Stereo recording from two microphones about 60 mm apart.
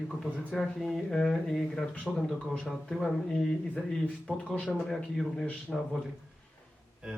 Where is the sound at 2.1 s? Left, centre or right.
Centre.